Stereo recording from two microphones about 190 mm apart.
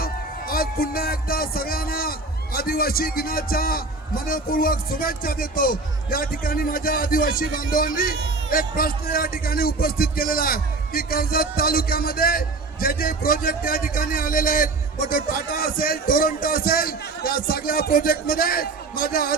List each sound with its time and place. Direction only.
0.0 s a man's voice: 50° left (ahead or behind)